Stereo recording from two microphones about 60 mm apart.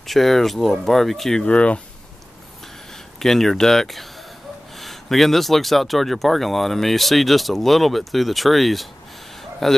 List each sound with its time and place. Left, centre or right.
0.0 s speech: centre
1.4 s speech: centre
3.2 s speech: centre
9.4 s a sound: centre